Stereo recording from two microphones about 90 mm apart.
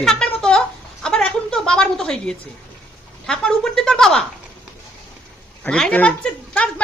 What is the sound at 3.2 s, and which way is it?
A woman's voice, 5° left (ahead or behind).